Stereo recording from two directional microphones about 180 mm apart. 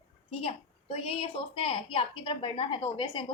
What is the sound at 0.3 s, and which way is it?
A child's voice, 35° left (ahead or behind).